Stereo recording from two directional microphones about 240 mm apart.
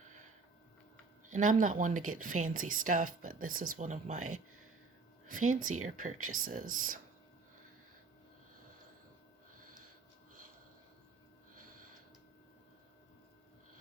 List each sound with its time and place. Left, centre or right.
1.3 s speech: right
5.3 s speech: right